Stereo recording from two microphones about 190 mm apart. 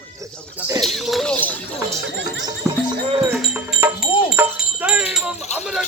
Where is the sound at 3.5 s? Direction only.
5° right (ahead or behind).